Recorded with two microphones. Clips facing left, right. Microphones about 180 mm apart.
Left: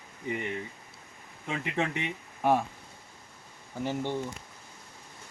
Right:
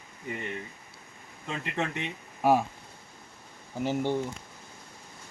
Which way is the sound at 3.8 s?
15° right (ahead or behind).